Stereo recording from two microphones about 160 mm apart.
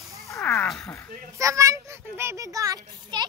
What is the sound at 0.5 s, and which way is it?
Cat, 5° left (ahead or behind).